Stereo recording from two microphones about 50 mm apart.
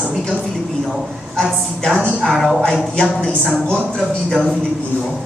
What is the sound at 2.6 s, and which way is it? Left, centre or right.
Speech, centre.